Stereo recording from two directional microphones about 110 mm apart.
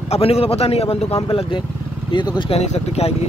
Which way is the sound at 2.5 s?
75° left (ahead or behind).